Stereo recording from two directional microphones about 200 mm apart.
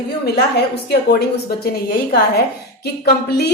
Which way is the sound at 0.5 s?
55° left (ahead or behind).